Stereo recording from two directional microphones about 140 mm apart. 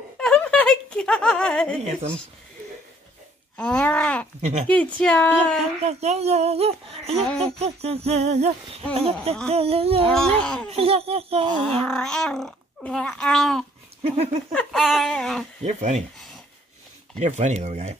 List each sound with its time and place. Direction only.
0.2 s a sound: 5° left (ahead or behind)
3.5 s speech: 10° left (ahead or behind)
4.4 s speech: 50° right (ahead or behind)
4.6 s speech: 10° left (ahead or behind)
5.8 s speech: 50° right (ahead or behind)
7.1 s speech: centre (ahead or behind)
7.5 s speech: 50° right (ahead or behind)
10.0 s speech: 5° left (ahead or behind)
10.7 s speech: 45° right (ahead or behind)
11.6 s speech: 5° left (ahead or behind)
14.0 s speech: 50° right (ahead or behind)
14.5 s speech: 5° left (ahead or behind)
15.6 s speech: 55° right (ahead or behind)
17.2 s speech: 55° right (ahead or behind)